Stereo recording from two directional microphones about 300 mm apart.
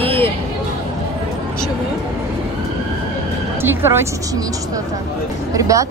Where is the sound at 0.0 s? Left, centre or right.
Centre.